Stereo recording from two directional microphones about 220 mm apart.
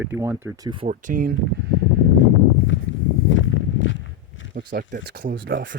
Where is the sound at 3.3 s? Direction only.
60° left (ahead or behind).